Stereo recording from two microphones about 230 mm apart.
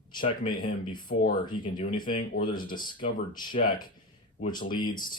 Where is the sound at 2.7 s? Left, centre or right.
Left.